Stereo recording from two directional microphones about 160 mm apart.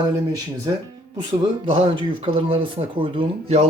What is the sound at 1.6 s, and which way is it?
Speech, 30° right (ahead or behind).